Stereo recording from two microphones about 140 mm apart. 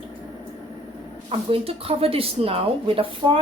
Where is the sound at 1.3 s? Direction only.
45° right (ahead or behind).